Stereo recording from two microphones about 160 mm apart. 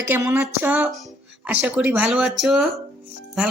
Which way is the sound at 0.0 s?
15° right (ahead or behind).